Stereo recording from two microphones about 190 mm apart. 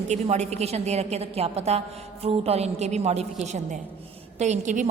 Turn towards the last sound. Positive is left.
turn(degrees=-40)  # may be behind; listen again after turning